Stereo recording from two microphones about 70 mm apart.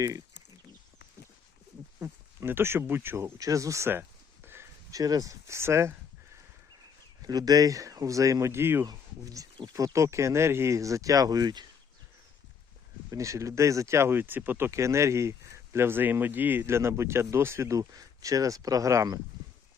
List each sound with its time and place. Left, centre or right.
2.0 s speech: right
3.3 s speech: right
4.4 s a sound: right
4.9 s speech: right
7.2 s speech: right
8.9 s speech: right
13.1 s speech: right
14.7 s speech: right
16.6 s speech: right